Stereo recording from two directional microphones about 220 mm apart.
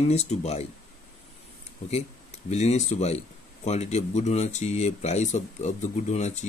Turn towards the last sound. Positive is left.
turn(degrees=30)  # may be behind; listen again after turning